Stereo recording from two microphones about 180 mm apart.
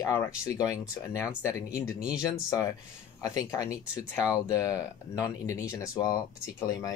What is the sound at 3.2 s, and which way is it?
Speech, 20° left (ahead or behind).